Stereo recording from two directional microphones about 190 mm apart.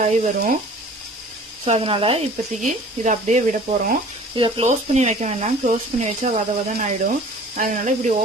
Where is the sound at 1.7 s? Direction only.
30° right (ahead or behind).